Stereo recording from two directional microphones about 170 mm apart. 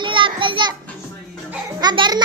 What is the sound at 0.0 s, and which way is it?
Children playing, 30° right (ahead or behind).